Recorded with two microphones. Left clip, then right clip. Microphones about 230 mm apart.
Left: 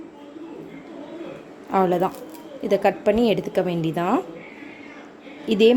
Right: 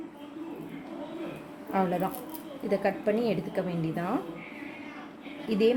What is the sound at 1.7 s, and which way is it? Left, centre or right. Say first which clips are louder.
A woman's voice: left 9 dB; left.